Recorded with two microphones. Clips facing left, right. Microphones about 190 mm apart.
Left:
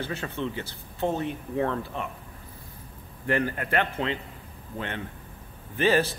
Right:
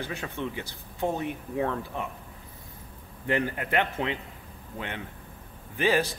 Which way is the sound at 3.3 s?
15° right (ahead or behind).